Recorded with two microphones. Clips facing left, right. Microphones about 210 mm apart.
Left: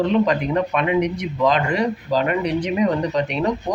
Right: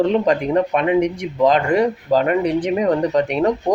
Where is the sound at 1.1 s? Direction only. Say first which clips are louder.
Right 3 dB; 50° right (ahead or behind).